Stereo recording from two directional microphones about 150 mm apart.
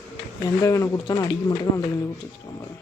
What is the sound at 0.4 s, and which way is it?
Speech, 20° left (ahead or behind).